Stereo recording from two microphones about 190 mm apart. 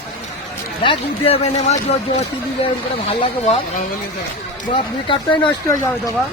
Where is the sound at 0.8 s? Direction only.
30° left (ahead or behind).